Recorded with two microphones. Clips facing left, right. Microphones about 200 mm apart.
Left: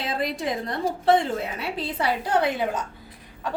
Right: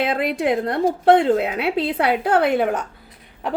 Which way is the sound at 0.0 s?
65° right (ahead or behind).